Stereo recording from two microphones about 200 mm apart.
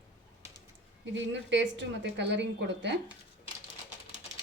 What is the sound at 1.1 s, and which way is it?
A woman's voice, 65° right (ahead or behind).